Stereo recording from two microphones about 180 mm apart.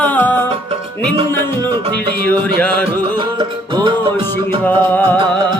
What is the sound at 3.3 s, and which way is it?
Music, 25° right (ahead or behind).